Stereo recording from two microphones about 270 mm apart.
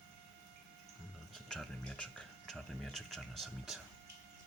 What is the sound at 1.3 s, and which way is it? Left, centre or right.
Speech, centre.